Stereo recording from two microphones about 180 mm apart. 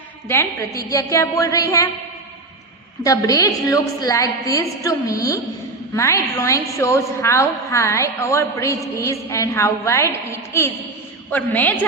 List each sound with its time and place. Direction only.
0.3 s a woman's voice: 15° left (ahead or behind)
3.0 s a woman's voice: 20° left (ahead or behind)